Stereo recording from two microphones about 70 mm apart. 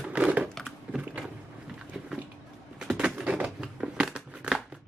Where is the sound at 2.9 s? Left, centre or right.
Centre.